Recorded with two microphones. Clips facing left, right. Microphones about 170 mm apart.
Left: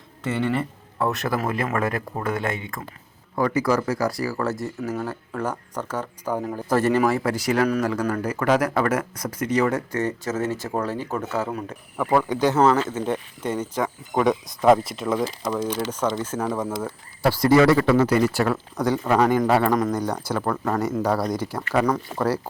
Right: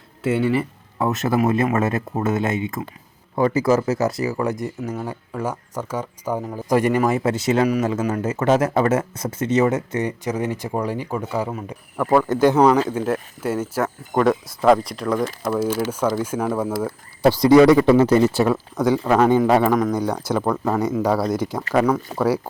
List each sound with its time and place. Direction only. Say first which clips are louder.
0.2 s speech: right 4 dB; 5° right (ahead or behind)
1.1 s speech: right 6 dB; 20° right (ahead or behind)